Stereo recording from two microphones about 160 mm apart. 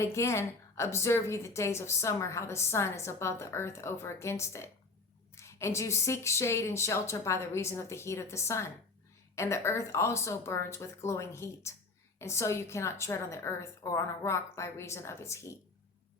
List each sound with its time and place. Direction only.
0.0 s a woman's voice: 15° left (ahead or behind)